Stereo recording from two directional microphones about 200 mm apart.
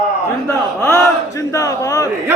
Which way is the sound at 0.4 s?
10° left (ahead or behind).